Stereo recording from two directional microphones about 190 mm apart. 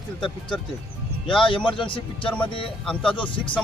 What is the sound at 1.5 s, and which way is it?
A man's voice, 25° left (ahead or behind).